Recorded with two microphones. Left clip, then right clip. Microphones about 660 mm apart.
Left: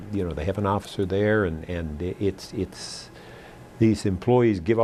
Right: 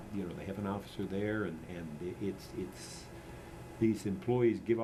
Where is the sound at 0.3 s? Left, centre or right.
Left.